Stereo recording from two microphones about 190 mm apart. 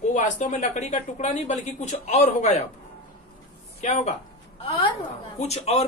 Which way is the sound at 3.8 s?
40° left (ahead or behind).